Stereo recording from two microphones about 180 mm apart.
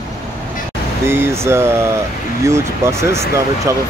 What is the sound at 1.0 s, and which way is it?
Speech, 15° right (ahead or behind).